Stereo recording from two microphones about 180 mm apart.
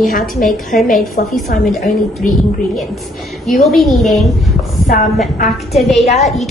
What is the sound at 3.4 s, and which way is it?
A woman's voice, centre (ahead or behind).